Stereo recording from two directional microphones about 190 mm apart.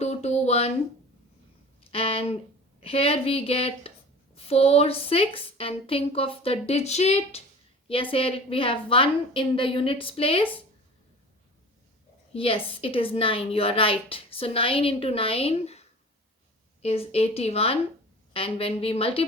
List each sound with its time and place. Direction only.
0.0 s a sound: 35° left (ahead or behind)
1.9 s a woman's voice: 30° left (ahead or behind)
12.3 s a woman's voice: 30° left (ahead or behind)
16.8 s a woman's voice: 30° left (ahead or behind)